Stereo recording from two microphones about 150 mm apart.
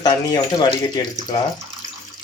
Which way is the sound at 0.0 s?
25° left (ahead or behind).